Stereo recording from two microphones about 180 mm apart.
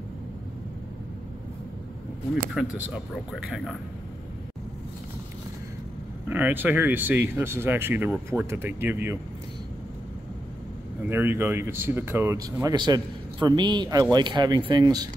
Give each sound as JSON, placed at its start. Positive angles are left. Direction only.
{"t": 2.5, "sound": "speech", "side_deg": 0}
{"t": 6.2, "sound": "speech", "side_deg": -10}
{"t": 11.1, "sound": "a man's voice", "side_deg": -15}